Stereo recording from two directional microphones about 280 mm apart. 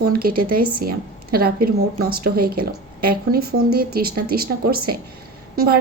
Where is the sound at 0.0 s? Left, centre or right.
Right.